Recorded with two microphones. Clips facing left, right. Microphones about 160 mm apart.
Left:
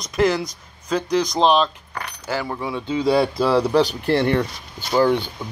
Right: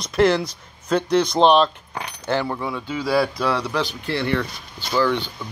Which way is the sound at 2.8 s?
25° left (ahead or behind).